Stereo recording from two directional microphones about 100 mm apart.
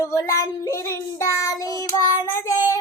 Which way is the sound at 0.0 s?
35° left (ahead or behind).